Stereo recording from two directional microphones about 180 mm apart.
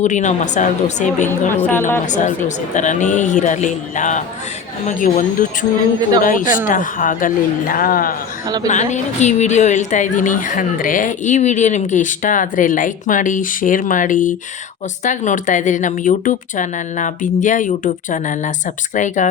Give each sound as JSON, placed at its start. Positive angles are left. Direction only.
{"t": 0.0, "sound": "a woman's voice", "side_deg": 40}
{"t": 8.6, "sound": "a woman's voice", "side_deg": 40}